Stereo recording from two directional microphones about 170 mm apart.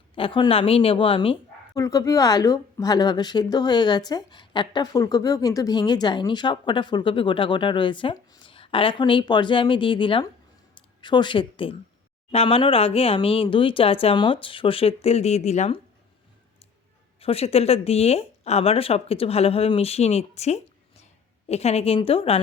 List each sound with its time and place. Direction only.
0.2 s speech: 30° left (ahead or behind)
1.7 s speech: 20° left (ahead or behind); by 15.8 s 40° left (ahead or behind)
17.2 s speech: 35° left (ahead or behind)